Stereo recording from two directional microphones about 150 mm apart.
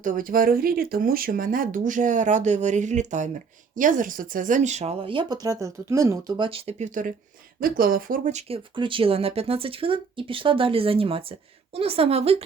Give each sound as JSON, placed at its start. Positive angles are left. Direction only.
{"t": 0.0, "sound": "speech", "side_deg": -65}
{"t": 7.6, "sound": "speech", "side_deg": -70}